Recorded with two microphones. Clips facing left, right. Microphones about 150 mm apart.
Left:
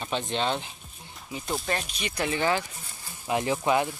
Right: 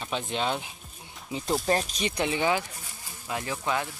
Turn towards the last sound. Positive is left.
turn(degrees=20)  # may be behind; listen again after turning